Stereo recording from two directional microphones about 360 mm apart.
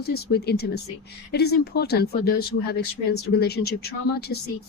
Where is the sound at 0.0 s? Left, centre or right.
Left.